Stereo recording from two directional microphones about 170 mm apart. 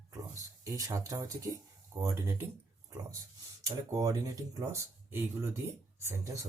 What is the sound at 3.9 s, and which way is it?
Speech, 20° right (ahead or behind).